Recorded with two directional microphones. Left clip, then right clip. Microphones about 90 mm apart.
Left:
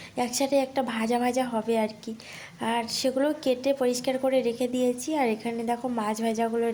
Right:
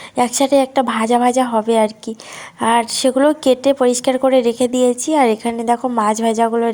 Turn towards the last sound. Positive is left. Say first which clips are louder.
# right 12 dB
turn(degrees=-55)  # may be behind; listen again after turning